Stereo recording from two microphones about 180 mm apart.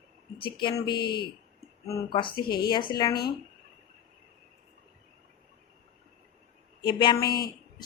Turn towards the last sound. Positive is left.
turn(degrees=55)  # may be behind; listen again after turning